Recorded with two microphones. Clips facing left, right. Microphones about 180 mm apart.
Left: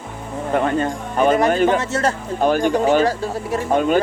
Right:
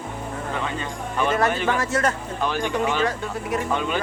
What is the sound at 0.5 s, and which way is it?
Speech, 50° left (ahead or behind).